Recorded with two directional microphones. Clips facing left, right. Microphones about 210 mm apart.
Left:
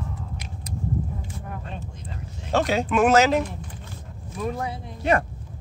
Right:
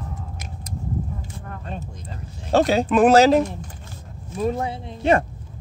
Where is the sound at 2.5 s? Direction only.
35° right (ahead or behind).